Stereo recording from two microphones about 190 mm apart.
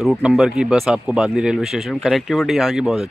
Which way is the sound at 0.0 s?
Centre (ahead or behind).